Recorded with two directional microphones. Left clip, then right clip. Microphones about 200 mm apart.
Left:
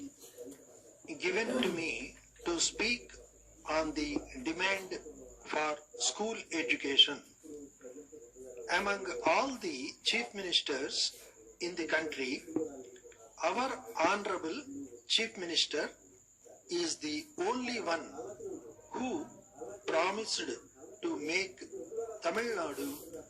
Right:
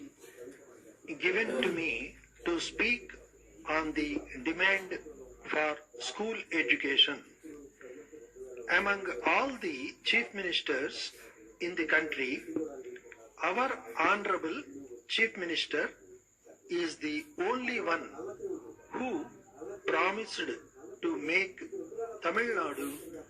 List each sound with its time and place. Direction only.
1.0 s a man's voice: 15° right (ahead or behind)
8.6 s speech: 15° right (ahead or behind)
13.4 s a man's voice: 15° right (ahead or behind)
18.9 s a sound: 15° right (ahead or behind)
19.8 s speech: 15° right (ahead or behind)
21.0 s a sound: 15° right (ahead or behind)
22.2 s speech: 15° right (ahead or behind)